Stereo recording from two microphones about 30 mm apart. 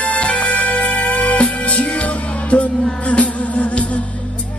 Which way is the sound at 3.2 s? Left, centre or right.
Left.